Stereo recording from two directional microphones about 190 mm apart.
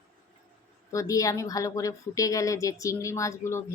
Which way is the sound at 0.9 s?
15° left (ahead or behind).